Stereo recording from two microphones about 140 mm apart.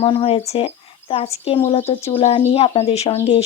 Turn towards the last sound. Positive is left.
turn(degrees=50)  # may be behind; listen again after turning